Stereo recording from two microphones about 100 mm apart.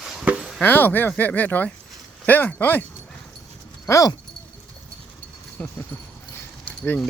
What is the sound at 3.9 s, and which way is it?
Speech, 30° left (ahead or behind).